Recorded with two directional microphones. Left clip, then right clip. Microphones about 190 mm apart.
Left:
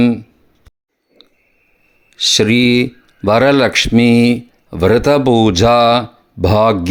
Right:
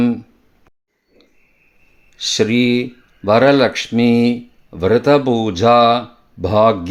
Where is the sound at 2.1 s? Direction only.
25° left (ahead or behind).